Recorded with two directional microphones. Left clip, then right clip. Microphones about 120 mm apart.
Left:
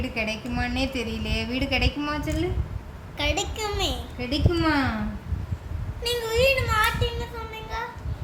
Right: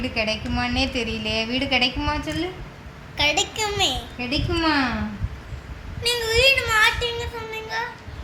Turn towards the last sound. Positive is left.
turn(degrees=20)  # may be behind; listen again after turning